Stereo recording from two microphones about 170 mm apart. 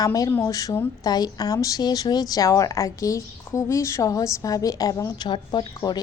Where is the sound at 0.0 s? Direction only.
20° left (ahead or behind).